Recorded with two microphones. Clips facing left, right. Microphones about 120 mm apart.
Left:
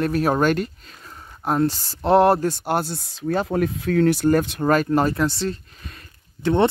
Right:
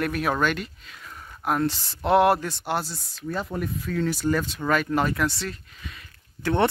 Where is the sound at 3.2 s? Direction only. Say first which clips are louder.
Left 8 dB; 80° left; by 4.6 s 60° left (ahead or behind).